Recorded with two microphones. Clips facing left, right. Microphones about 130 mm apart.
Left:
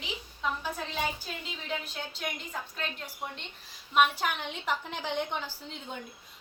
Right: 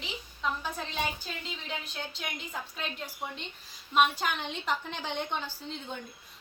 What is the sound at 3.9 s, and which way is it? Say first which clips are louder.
A woman's voice: even; 5° left (ahead or behind).